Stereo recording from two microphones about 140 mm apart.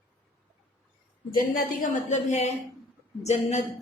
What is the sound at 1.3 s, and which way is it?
A woman's voice, 85° left.